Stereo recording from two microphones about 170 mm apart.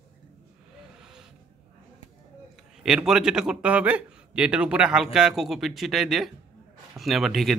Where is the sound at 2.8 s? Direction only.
5° right (ahead or behind).